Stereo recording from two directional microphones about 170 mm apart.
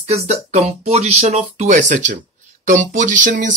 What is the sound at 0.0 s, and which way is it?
Speech, 40° right (ahead or behind).